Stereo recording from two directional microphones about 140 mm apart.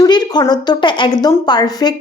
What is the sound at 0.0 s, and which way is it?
A woman's voice, 30° left (ahead or behind).